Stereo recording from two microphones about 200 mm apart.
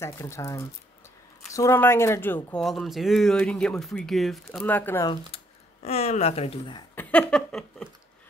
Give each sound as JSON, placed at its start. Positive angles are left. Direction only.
{"t": 0.0, "sound": "speech", "side_deg": 15}
{"t": 5.0, "sound": "speech", "side_deg": 30}
{"t": 7.0, "sound": "a sound", "side_deg": 10}